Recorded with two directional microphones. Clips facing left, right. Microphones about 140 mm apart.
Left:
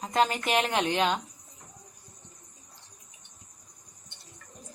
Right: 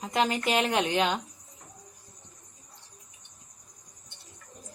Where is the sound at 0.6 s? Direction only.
30° left (ahead or behind).